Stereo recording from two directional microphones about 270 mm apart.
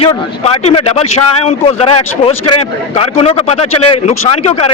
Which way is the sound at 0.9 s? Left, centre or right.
Left.